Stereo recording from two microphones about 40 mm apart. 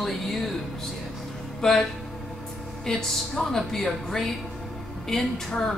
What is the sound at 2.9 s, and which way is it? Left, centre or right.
Speech, centre.